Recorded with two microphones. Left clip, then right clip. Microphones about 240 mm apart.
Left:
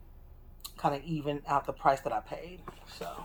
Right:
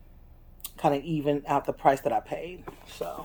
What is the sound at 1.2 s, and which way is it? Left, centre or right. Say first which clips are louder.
Speech: right 3 dB; right.